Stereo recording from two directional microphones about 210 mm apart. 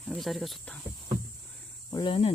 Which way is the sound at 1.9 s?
25° left (ahead or behind).